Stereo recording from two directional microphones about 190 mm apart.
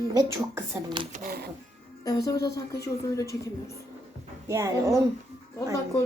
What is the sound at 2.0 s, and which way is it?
A woman's voice, 20° left (ahead or behind).